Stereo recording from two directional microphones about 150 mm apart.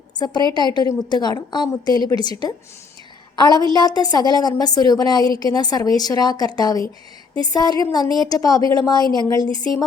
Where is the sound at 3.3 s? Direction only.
30° left (ahead or behind).